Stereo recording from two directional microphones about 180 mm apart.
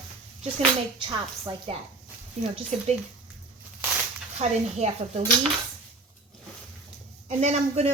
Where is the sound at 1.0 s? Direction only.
30° right (ahead or behind).